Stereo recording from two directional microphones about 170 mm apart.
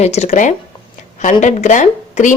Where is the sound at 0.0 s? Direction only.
40° left (ahead or behind).